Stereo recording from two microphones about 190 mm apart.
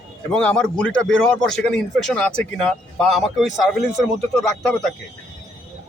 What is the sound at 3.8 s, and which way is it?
Speech, 40° right (ahead or behind).